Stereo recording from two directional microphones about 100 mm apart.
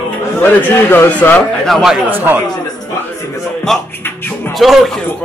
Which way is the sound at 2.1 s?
20° right (ahead or behind).